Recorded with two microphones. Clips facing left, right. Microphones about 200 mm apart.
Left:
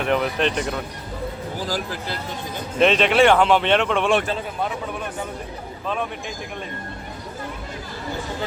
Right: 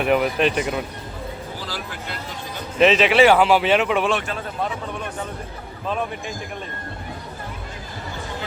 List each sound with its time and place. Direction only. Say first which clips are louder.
0.0 s speech: right 2 dB; 10° right (ahead or behind)
1.6 s speech: left 5 dB; 40° left (ahead or behind)
2.7 s speech: right 1 dB; centre (ahead or behind)